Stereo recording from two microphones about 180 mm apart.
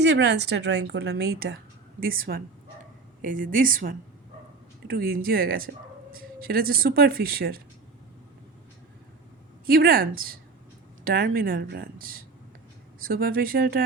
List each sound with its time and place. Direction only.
0.0 s a woman's voice: 70° right (ahead or behind); by 7.6 s 55° right (ahead or behind)
9.6 s speech: 55° right (ahead or behind)